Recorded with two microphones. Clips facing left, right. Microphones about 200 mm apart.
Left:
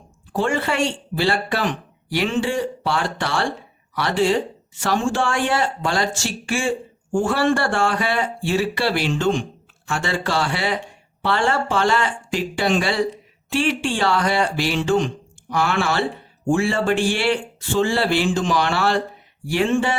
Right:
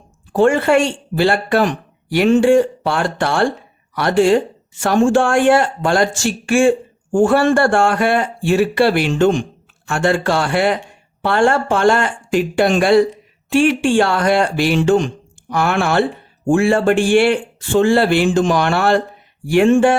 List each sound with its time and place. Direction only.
0.3 s speech: 50° right (ahead or behind)